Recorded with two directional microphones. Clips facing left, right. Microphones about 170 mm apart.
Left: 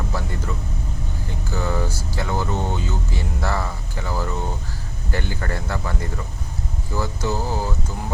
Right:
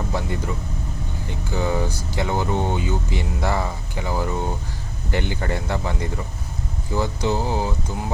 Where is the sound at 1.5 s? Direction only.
15° right (ahead or behind).